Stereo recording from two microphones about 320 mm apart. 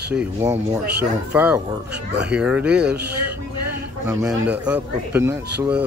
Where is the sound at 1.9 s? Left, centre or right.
Right.